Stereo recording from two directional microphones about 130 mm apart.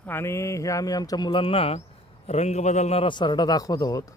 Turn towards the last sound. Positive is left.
turn(degrees=30)  # may be behind; listen again after turning